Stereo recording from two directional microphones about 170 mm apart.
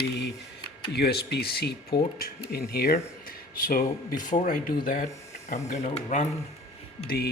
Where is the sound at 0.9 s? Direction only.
75° left (ahead or behind); by 5.1 s 55° left (ahead or behind).